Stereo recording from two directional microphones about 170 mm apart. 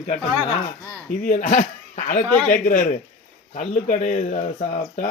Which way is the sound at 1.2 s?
50° left (ahead or behind).